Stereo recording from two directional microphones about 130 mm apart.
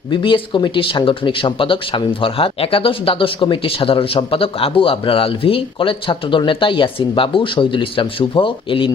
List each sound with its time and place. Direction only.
0.1 s speech: 40° left (ahead or behind)